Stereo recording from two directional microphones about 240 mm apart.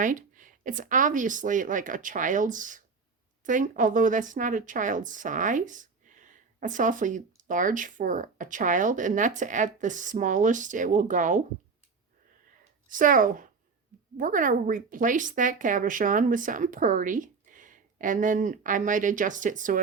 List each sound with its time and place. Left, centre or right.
0.0 s speech: right
12.9 s speech: right